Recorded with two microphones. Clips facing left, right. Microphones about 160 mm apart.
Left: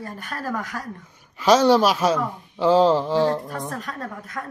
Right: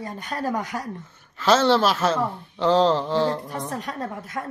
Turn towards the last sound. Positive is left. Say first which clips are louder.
# right 2 dB
turn(degrees=-25)  # may be behind; listen again after turning